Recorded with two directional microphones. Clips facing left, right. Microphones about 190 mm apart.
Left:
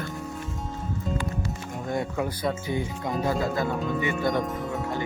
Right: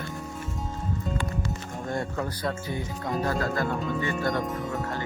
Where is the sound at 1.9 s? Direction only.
10° left (ahead or behind).